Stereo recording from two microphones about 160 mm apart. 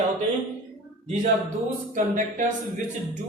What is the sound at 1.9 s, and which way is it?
Speech, 55° right (ahead or behind).